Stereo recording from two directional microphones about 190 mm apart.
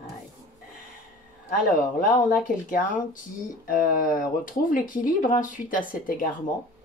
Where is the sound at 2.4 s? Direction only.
45° left (ahead or behind).